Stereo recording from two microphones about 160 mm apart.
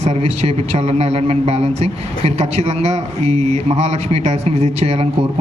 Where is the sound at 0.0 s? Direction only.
40° right (ahead or behind).